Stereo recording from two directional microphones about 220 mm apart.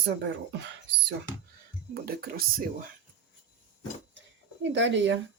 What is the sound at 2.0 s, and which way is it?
Speech, 40° right (ahead or behind).